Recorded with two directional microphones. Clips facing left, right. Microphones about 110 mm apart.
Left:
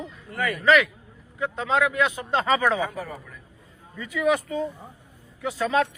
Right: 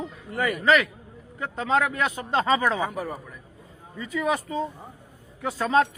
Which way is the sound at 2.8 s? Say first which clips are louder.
Right 1 dB; 20° right (ahead or behind).